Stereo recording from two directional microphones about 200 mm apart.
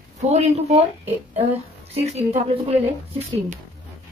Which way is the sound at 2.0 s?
30° right (ahead or behind).